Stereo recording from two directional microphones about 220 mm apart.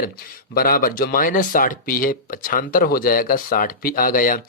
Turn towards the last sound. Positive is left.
turn(degrees=40)  # may be behind; listen again after turning